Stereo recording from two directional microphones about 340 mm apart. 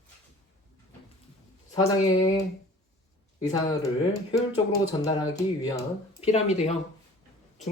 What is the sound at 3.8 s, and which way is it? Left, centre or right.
Speech, centre.